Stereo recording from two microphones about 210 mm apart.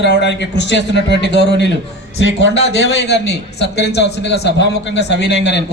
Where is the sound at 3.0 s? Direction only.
55° left (ahead or behind).